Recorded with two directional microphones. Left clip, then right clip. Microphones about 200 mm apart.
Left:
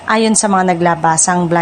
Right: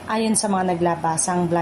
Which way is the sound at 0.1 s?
30° left (ahead or behind).